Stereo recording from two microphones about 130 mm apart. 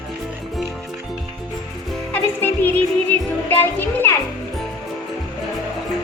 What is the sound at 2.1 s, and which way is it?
Music, 15° left (ahead or behind).